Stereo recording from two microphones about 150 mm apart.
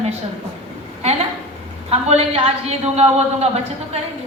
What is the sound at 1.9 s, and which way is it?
A woman's voice, 45° right (ahead or behind).